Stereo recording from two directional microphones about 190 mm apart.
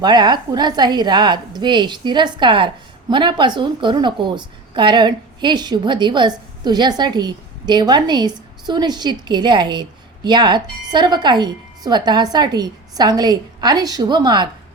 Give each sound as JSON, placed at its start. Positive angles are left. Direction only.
{"t": 0.0, "sound": "a woman's voice", "side_deg": -20}